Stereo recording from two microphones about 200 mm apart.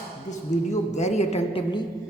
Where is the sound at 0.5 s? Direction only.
35° left (ahead or behind).